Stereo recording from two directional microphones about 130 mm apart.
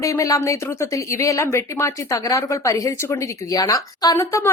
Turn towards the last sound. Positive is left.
turn(degrees=25)  # may be behind; listen again after turning